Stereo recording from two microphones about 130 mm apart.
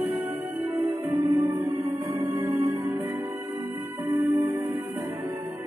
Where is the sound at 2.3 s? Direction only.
15° right (ahead or behind).